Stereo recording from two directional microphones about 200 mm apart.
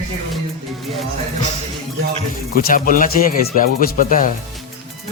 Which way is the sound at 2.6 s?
45° left (ahead or behind).